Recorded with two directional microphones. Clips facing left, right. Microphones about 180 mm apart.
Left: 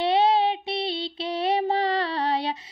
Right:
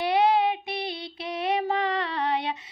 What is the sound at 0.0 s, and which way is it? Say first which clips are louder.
Child singing: left 1 dB; 30° left (ahead or behind).